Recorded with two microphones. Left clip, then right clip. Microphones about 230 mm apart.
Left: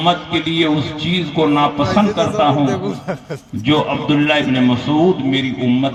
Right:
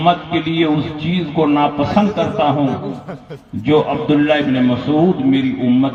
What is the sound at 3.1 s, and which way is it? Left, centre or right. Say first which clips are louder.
Speech: left 7 dB; left.